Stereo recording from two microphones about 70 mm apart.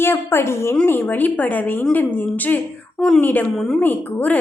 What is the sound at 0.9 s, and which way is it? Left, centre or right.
A child's voice, left.